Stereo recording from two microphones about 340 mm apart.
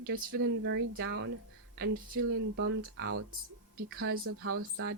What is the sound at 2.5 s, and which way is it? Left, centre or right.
Speech, right.